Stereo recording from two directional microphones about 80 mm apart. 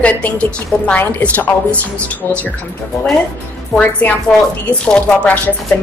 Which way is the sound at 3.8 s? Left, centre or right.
Centre.